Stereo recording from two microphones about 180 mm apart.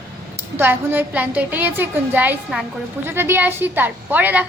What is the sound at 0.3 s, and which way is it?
A woman's voice, 10° right (ahead or behind).